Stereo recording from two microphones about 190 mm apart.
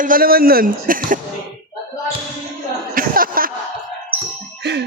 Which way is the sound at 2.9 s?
50° right (ahead or behind).